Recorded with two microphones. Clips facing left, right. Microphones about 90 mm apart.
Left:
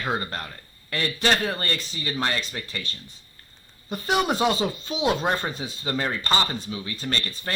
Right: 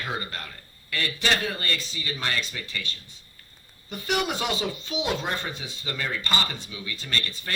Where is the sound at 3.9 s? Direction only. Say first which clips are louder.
Left 4 dB; 35° left (ahead or behind).